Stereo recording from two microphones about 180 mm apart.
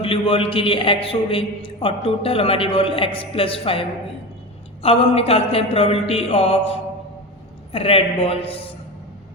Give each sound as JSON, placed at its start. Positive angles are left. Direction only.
{"t": 0.0, "sound": "a man's voice", "side_deg": 30}